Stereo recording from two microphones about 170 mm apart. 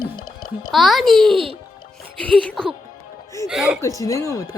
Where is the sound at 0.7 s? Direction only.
Centre (ahead or behind).